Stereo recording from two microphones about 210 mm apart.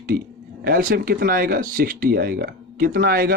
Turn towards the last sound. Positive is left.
turn(degrees=-45)  # may be behind; listen again after turning